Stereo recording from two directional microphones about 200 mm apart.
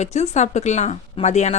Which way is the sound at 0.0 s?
35° left (ahead or behind).